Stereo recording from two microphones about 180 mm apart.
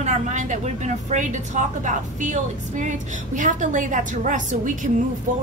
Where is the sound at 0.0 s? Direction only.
45° right (ahead or behind).